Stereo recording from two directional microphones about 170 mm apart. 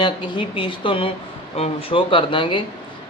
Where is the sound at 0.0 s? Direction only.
30° left (ahead or behind).